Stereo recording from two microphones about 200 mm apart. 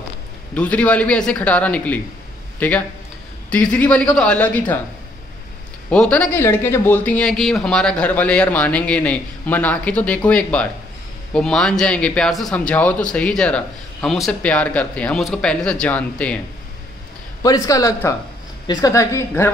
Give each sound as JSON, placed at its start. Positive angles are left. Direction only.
{"t": 0.6, "sound": "a man's voice", "side_deg": 5}
{"t": 5.9, "sound": "a man's voice", "side_deg": 5}
{"t": 17.4, "sound": "a man's voice", "side_deg": 15}